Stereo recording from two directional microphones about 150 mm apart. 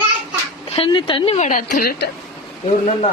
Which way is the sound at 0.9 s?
35° left (ahead or behind).